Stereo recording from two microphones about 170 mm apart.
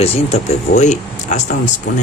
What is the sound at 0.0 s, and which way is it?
Speech, 35° left (ahead or behind).